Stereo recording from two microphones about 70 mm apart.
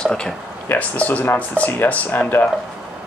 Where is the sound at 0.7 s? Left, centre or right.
Left.